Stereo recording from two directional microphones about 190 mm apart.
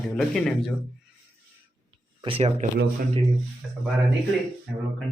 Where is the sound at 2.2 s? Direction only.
30° right (ahead or behind).